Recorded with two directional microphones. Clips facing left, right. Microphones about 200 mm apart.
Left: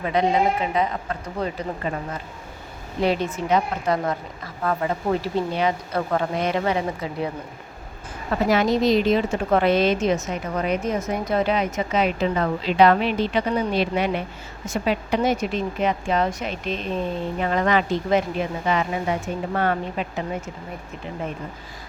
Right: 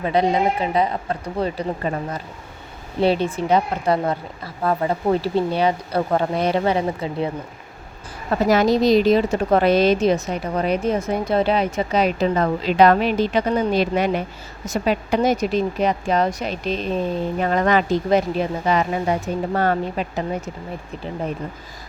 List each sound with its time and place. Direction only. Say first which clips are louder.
0.0 s speech: right 2 dB; 35° right (ahead or behind)
3.0 s speech: right 4 dB; 30° right (ahead or behind)
8.4 s speech: right 3 dB; 40° right (ahead or behind)